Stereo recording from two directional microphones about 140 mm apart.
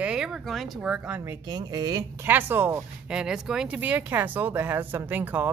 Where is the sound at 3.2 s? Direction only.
5° right (ahead or behind).